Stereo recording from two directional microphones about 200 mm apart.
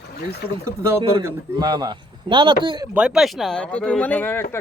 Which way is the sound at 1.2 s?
20° right (ahead or behind).